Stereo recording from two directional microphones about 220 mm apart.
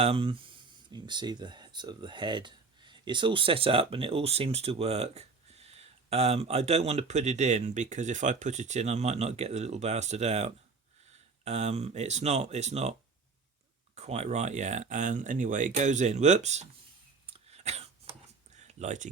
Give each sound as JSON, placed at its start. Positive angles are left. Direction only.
{"t": 0.0, "sound": "speech", "side_deg": -25}
{"t": 13.9, "sound": "speech", "side_deg": -30}
{"t": 17.2, "sound": "cough", "side_deg": -25}
{"t": 18.5, "sound": "a sound", "side_deg": -30}